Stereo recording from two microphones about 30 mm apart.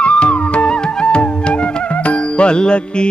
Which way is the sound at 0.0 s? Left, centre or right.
Left.